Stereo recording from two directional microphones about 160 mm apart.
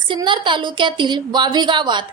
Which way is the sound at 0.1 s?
30° right (ahead or behind).